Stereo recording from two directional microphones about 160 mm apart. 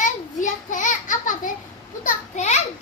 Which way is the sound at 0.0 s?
50° left (ahead or behind).